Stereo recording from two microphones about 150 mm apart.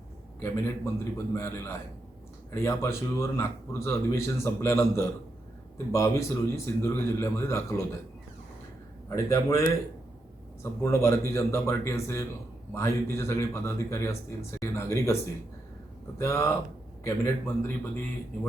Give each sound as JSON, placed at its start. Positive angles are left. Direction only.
{"t": 0.4, "sound": "speech", "side_deg": 20}
{"t": 9.0, "sound": "speech", "side_deg": 20}